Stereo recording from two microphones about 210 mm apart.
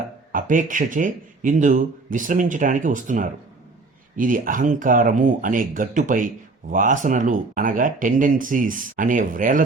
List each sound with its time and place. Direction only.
0.3 s speech: 40° right (ahead or behind)